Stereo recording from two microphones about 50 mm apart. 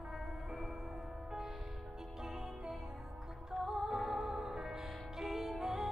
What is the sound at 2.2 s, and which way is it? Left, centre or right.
Music, centre.